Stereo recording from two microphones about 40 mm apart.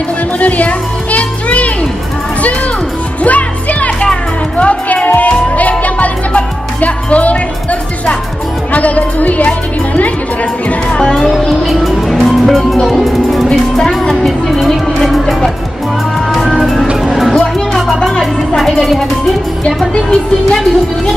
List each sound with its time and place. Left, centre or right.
0.4 s music: left
3.3 s music: left
8.7 s speech: left
10.9 s speech: left
11.6 s music: centre
13.5 s music: centre
14.2 s speech: centre
16.3 s music: centre
18.6 s speech: centre